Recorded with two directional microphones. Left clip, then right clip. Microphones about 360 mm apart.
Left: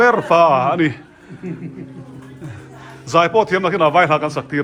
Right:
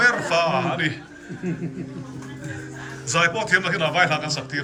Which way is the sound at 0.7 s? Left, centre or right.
Centre.